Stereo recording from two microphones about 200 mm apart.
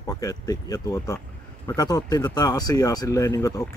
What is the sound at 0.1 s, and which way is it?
Speech, 20° left (ahead or behind).